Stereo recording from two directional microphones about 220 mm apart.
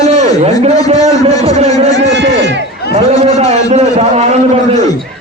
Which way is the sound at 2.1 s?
50° right (ahead or behind).